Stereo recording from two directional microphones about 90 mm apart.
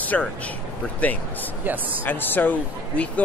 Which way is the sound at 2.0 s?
20° left (ahead or behind).